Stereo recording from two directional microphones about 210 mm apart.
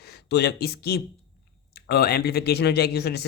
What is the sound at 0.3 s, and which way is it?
Speech, 50° left (ahead or behind).